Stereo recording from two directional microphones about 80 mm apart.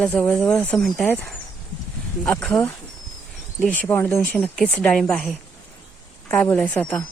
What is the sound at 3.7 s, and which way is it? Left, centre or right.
Speech, left.